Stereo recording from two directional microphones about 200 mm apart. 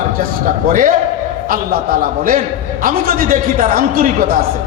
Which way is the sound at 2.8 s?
45° right (ahead or behind).